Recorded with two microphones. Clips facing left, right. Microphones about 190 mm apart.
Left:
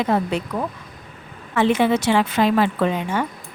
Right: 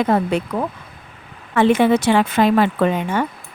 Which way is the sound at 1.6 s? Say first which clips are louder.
Right 3 dB; 55° right (ahead or behind).